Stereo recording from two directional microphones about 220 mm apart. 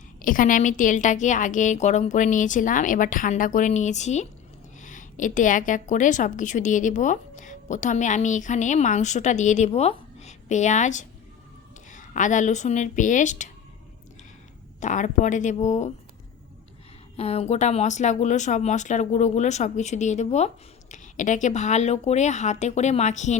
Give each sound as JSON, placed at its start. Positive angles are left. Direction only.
{"t": 0.2, "sound": "a woman's voice", "side_deg": 40}
{"t": 14.8, "sound": "a woman's voice", "side_deg": 35}
{"t": 17.2, "sound": "a woman's voice", "side_deg": 30}